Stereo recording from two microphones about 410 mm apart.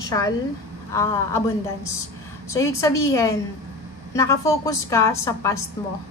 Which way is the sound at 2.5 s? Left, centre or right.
Centre.